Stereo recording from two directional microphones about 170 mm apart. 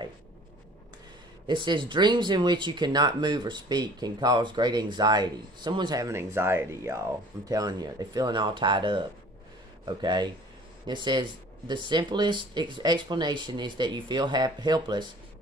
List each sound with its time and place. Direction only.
1.5 s speech: 30° right (ahead or behind)